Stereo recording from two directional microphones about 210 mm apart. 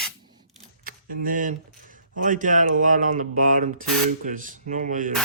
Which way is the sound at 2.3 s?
40° right (ahead or behind).